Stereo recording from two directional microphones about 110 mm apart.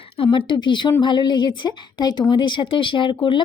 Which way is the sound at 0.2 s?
50° left (ahead or behind).